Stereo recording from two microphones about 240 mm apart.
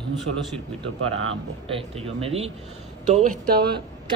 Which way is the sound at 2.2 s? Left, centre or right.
Right.